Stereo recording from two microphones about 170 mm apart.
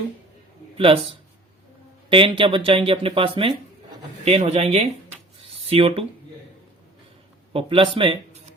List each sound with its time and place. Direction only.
0.8 s speech: 35° right (ahead or behind)
7.5 s speech: 30° right (ahead or behind)